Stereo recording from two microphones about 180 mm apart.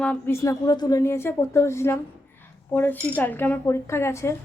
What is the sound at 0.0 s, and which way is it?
A woman's voice, 10° left (ahead or behind).